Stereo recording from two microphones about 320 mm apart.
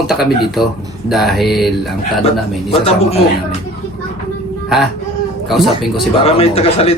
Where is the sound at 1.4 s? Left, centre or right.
Centre.